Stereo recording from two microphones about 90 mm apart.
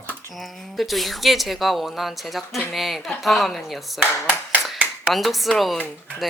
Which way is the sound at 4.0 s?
20° right (ahead or behind).